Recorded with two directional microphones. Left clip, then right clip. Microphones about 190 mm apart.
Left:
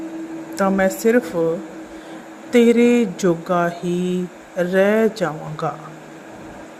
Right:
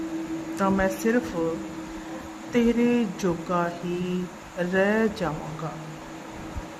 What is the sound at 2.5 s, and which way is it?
Speech, 25° left (ahead or behind).